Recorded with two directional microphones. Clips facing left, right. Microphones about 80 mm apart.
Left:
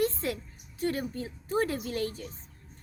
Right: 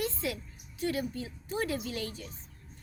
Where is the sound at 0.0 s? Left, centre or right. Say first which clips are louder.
Left 5 dB; left.